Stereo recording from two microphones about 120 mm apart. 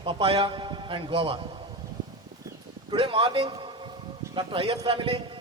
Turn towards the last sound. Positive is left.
turn(degrees=-50)  # may be behind; listen again after turning